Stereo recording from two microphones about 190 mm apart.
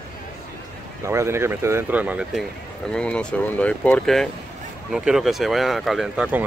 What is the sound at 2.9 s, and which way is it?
Speech, 5° left (ahead or behind).